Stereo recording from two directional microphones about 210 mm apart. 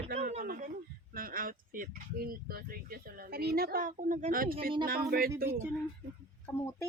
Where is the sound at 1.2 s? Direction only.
40° right (ahead or behind).